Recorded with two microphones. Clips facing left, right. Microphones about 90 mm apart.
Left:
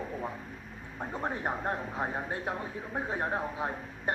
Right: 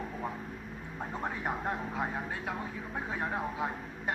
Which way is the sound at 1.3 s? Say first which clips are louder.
Left 2 dB; 30° left (ahead or behind).